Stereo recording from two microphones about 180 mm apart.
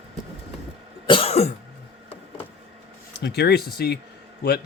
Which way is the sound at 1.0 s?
30° left (ahead or behind).